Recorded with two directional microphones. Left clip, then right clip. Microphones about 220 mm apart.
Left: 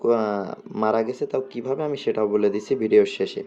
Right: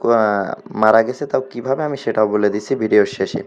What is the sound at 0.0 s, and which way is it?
Speech, 15° right (ahead or behind).